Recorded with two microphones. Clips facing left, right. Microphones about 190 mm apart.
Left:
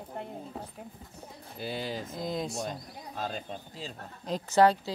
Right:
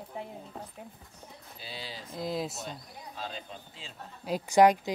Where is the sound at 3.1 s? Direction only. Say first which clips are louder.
Left 5 dB; 45° left (ahead or behind).